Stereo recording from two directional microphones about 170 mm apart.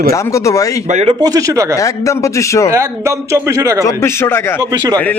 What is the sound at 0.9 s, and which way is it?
Speech, 40° right (ahead or behind).